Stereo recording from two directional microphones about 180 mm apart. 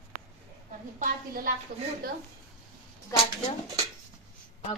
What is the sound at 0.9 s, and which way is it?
Speech, 50° right (ahead or behind).